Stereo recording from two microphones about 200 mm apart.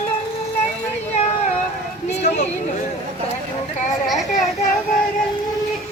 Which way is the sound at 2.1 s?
35° left (ahead or behind).